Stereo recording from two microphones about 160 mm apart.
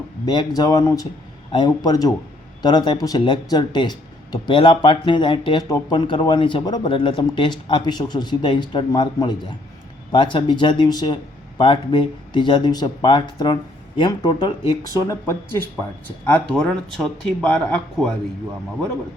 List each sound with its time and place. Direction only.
0.3 s speech: 25° left (ahead or behind); by 18.1 s 5° left (ahead or behind)